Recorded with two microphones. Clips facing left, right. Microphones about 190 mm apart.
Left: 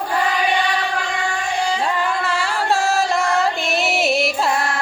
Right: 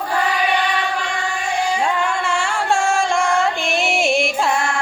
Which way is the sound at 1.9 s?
Centre (ahead or behind).